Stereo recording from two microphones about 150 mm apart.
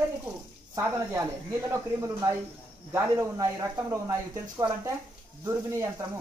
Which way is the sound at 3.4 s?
25° right (ahead or behind).